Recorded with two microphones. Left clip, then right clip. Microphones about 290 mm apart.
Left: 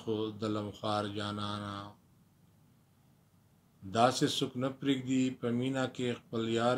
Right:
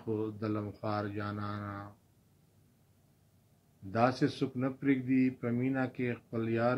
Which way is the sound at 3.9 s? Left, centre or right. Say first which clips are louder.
Left 2 dB; left.